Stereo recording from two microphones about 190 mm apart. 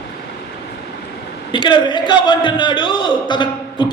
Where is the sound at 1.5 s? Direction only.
25° left (ahead or behind).